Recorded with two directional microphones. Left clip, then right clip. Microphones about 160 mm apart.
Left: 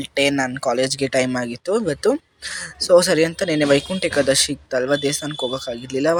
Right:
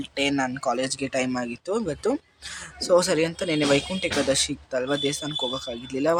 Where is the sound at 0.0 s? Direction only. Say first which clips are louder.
Left 6 dB; 35° left (ahead or behind).